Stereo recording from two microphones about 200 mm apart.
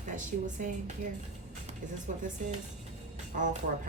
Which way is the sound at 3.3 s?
40° right (ahead or behind).